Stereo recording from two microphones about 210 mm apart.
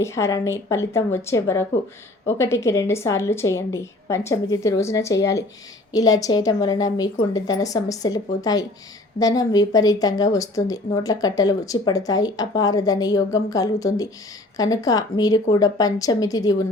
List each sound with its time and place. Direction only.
0.0 s speech: 15° left (ahead or behind)